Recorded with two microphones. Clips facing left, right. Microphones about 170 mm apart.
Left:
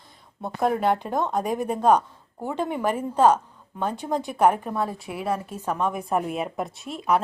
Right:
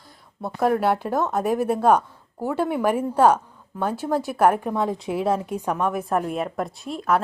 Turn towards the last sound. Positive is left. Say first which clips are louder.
# right 1 dB
turn(degrees=0)  # may be behind; listen again after turning